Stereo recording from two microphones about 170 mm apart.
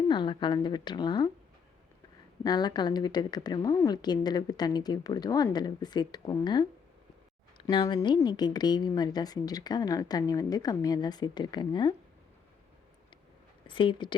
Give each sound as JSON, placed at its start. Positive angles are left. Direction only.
{"t": 0.1, "sound": "a woman's voice", "side_deg": 25}
{"t": 2.4, "sound": "a woman's voice", "side_deg": 25}
{"t": 13.7, "sound": "a woman's voice", "side_deg": 30}